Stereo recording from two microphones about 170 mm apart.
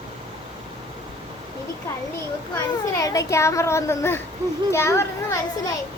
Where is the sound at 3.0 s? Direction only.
20° left (ahead or behind).